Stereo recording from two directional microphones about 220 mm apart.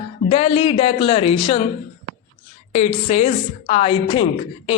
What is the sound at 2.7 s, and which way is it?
Speech, 30° left (ahead or behind).